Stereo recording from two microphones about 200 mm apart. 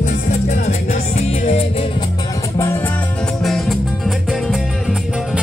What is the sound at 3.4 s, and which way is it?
Music, centre (ahead or behind).